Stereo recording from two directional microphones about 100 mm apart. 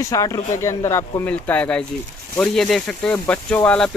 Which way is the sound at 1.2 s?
15° left (ahead or behind).